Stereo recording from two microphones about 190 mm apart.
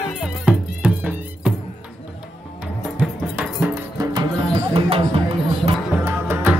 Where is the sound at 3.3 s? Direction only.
5° right (ahead or behind).